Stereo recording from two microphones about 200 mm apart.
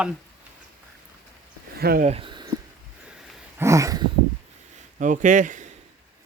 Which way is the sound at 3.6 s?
15° right (ahead or behind).